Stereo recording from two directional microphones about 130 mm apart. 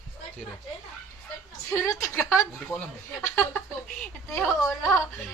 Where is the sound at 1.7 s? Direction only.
20° left (ahead or behind).